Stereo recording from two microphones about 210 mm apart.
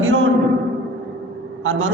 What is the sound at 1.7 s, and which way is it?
Speech, 70° right (ahead or behind).